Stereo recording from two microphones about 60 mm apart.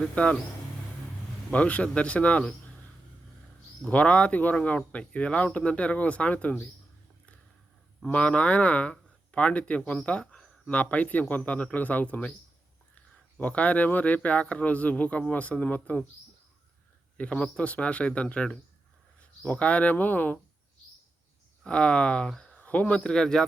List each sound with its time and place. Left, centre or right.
0.2 s speech: centre
1.5 s speech: left
3.8 s speech: centre
8.0 s speech: centre
13.4 s speech: left
17.2 s speech: left
21.6 s speech: centre